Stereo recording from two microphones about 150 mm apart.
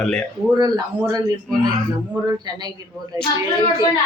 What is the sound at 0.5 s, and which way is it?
Speech, 25° right (ahead or behind).